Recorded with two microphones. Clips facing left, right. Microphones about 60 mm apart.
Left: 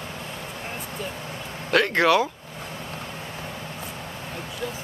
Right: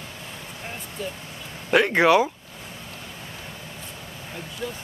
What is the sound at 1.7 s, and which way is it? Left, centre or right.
Speech, centre.